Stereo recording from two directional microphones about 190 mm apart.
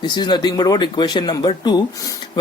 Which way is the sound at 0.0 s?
20° left (ahead or behind).